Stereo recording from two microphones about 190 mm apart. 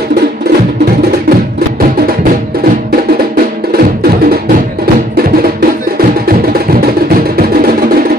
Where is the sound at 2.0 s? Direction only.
50° right (ahead or behind).